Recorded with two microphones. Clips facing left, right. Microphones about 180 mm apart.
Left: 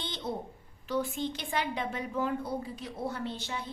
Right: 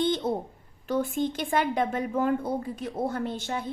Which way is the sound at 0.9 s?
50° right (ahead or behind).